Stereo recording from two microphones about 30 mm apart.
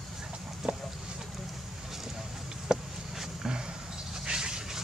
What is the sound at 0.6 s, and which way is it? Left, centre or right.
Chicken, centre.